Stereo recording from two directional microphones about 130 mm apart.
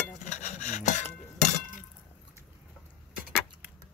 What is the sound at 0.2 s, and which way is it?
Filing, 60° left (ahead or behind).